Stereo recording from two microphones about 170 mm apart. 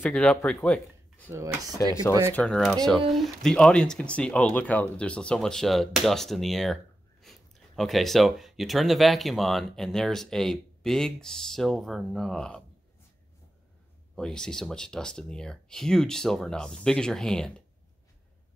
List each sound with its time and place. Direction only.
0.0 s speech: 5° left (ahead or behind)
1.8 s speech: 20° left (ahead or behind)
2.3 s speech: 5° left (ahead or behind)
14.1 s speech: 5° left (ahead or behind)